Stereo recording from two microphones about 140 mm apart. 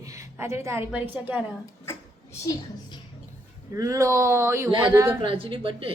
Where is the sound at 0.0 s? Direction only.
20° right (ahead or behind).